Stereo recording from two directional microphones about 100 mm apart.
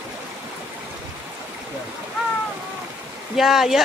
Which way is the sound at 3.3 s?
5° right (ahead or behind).